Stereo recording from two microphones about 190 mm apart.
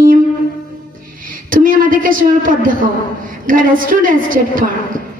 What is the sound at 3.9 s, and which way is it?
Child singing, 45° right (ahead or behind).